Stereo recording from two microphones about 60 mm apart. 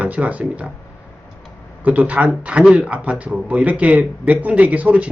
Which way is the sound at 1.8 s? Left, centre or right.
Right.